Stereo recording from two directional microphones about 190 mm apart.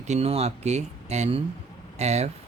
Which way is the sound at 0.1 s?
35° right (ahead or behind).